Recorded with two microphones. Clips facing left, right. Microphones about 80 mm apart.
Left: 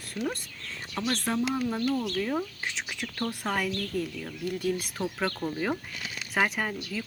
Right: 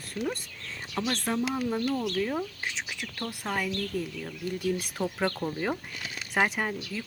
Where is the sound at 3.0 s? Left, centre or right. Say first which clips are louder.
Left 6 dB; left.